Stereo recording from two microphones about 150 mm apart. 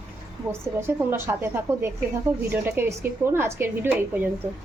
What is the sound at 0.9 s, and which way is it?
A woman's voice, 15° right (ahead or behind).